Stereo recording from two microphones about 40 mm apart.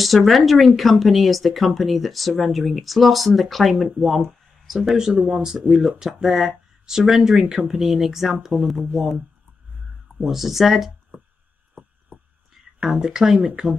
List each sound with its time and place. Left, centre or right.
0.0 s speech: centre
4.9 s speech: centre
10.2 s speech: centre
12.1 s a sound: right
12.8 s speech: centre